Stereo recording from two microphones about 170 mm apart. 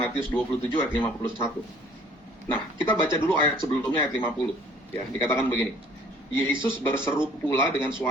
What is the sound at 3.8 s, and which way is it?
A man's voice, 10° left (ahead or behind).